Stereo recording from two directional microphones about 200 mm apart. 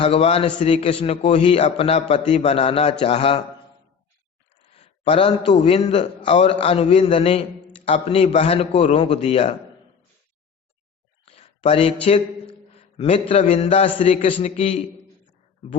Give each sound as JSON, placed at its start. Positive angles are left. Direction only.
{"t": 0.0, "sound": "a man's voice", "side_deg": 30}
{"t": 4.7, "sound": "a man's voice", "side_deg": 30}
{"t": 11.3, "sound": "a sound", "side_deg": 30}
{"t": 13.4, "sound": "a man's voice", "side_deg": 30}